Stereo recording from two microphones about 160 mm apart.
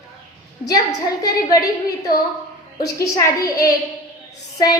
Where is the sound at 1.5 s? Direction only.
20° left (ahead or behind).